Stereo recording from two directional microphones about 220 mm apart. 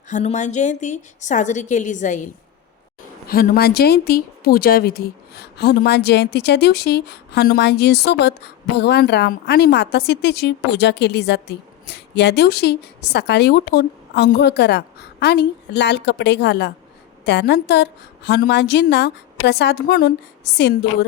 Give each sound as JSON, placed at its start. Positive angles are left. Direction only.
{"t": 0.1, "sound": "a woman's voice", "side_deg": 30}